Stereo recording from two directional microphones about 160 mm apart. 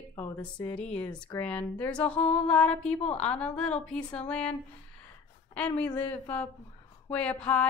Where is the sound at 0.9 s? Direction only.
10° left (ahead or behind).